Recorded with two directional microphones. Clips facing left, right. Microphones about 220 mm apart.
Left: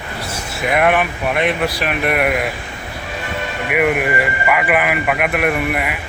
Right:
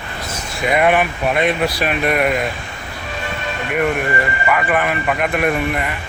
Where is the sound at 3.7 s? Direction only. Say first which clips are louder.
Left 2 dB; 10° left (ahead or behind).